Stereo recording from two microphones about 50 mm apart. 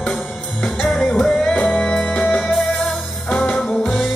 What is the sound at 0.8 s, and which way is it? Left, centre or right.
Music, left.